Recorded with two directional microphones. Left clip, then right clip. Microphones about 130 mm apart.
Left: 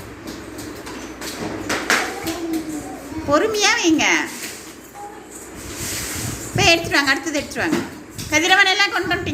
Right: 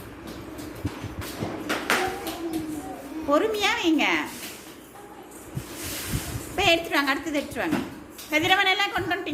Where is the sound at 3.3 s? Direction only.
20° right (ahead or behind).